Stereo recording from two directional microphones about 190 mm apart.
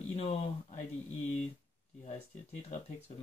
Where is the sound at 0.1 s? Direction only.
30° left (ahead or behind).